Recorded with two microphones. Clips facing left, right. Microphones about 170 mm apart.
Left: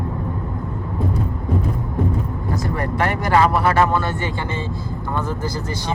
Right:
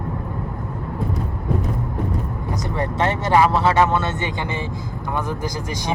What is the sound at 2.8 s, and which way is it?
Vehicle, 20° right (ahead or behind).